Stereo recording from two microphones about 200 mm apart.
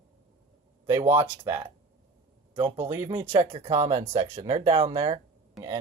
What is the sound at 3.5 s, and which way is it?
Speech, 30° right (ahead or behind).